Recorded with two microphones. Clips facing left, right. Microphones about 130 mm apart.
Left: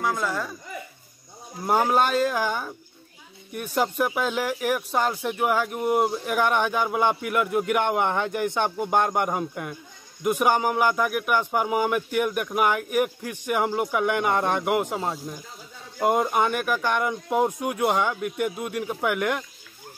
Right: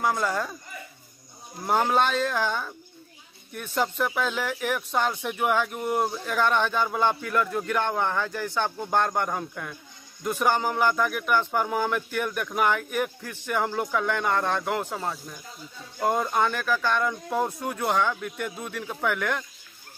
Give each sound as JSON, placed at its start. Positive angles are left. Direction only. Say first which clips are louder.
{"t": 0.0, "sound": "speech", "louder": "right 1 dB", "side_deg": 0}
{"t": 1.7, "sound": "speech", "louder": "left 2 dB", "side_deg": 10}